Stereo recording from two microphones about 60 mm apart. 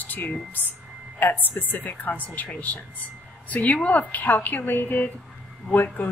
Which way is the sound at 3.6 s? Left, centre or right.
Left.